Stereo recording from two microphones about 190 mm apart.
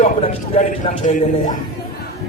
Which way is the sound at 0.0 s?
30° left (ahead or behind).